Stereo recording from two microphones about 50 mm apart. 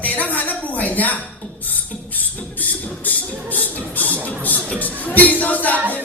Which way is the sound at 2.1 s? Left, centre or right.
Left.